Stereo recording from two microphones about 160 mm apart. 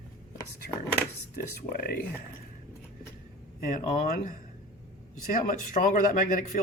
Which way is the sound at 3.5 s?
55° left (ahead or behind).